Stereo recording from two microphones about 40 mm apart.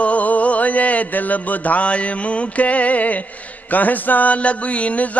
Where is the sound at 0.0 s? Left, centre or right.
Left.